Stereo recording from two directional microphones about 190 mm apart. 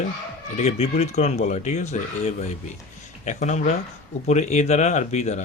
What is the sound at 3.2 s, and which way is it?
Speech, 40° left (ahead or behind).